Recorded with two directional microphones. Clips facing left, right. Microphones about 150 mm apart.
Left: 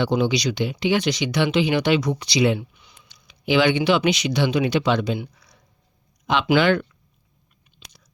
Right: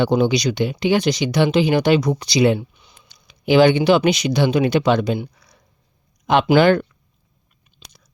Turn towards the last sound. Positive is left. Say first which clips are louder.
# right 4 dB
turn(degrees=-45)  # may be behind; listen again after turning